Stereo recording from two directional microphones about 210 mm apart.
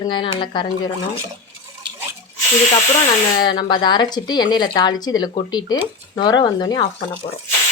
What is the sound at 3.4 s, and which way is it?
Speech, 20° left (ahead or behind).